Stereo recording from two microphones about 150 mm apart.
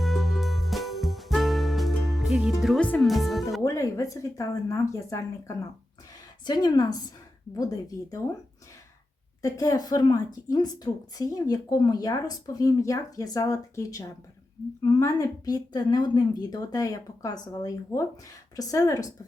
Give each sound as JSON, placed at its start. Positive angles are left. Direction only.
{"t": 0.0, "sound": "music", "side_deg": 0}
{"t": 2.8, "sound": "speech", "side_deg": 5}
{"t": 3.6, "sound": "speech", "side_deg": 20}
{"t": 6.4, "sound": "speech", "side_deg": 30}
{"t": 9.4, "sound": "speech", "side_deg": 25}